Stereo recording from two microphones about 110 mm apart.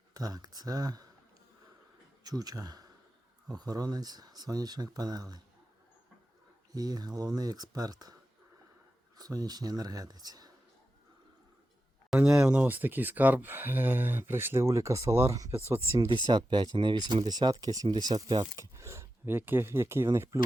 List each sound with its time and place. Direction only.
0.1 s speech: 35° right (ahead or behind)
2.2 s speech: 35° right (ahead or behind)
6.7 s speech: 35° right (ahead or behind)
9.1 s speech: 35° right (ahead or behind)
12.2 s speech: 10° right (ahead or behind); by 15.5 s 30° right (ahead or behind)
16.0 s speech: 45° right (ahead or behind); by 20.4 s 25° right (ahead or behind)